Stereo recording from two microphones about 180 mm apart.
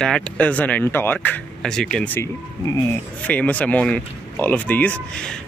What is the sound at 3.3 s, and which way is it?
Speech, 5° left (ahead or behind).